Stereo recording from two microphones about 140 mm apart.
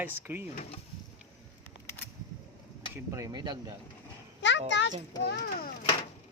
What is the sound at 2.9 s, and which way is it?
Speech, 20° right (ahead or behind).